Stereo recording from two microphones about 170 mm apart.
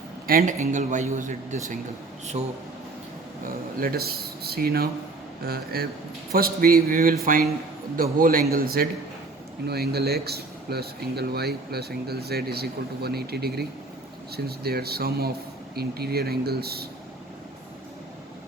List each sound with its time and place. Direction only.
0.3 s speech: 60° right (ahead or behind)
0.6 s speech: 45° right (ahead or behind)
3.4 s speech: 60° right (ahead or behind)